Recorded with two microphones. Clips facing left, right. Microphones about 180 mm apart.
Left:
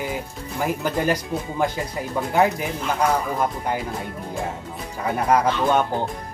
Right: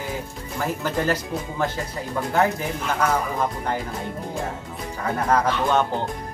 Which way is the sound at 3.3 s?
10° left (ahead or behind).